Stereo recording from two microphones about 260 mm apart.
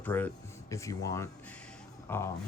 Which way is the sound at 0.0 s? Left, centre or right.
Centre.